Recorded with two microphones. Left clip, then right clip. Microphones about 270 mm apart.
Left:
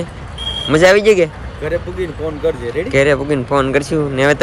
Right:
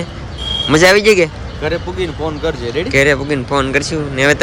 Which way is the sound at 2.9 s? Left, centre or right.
Centre.